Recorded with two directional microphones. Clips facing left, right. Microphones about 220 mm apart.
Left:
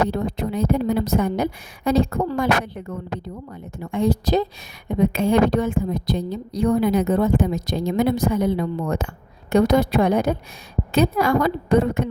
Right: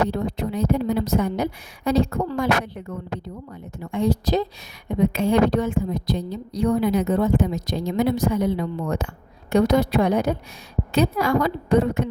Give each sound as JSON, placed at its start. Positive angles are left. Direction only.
{"t": 0.1, "sound": "a woman's voice", "side_deg": 50}
{"t": 3.9, "sound": "a woman's voice", "side_deg": 50}